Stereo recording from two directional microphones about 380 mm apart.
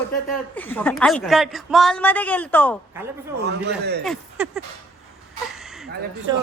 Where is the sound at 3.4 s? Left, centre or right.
Right.